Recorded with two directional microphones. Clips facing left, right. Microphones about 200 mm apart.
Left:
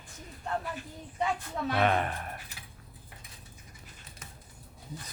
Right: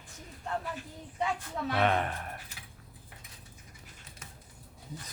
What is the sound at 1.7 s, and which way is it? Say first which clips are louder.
Speech: left 1 dB; 5° left (ahead or behind).